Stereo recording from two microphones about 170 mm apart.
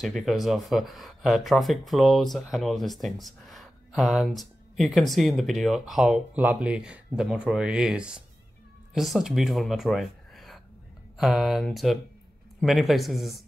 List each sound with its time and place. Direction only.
0.0 s speech: centre (ahead or behind)